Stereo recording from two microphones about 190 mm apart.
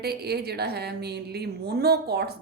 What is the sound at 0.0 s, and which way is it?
A woman's voice, 55° right (ahead or behind).